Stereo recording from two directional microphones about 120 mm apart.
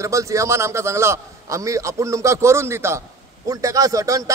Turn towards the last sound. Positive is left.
turn(degrees=-30)  # may be behind; listen again after turning